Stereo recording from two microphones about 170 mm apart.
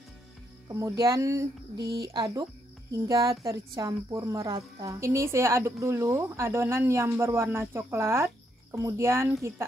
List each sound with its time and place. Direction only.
0.7 s speech: 20° right (ahead or behind)